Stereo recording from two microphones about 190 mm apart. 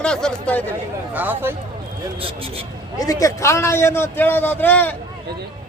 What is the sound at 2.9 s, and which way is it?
A man's voice, 20° left (ahead or behind).